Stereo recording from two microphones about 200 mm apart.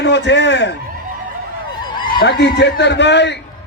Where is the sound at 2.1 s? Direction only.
50° left (ahead or behind).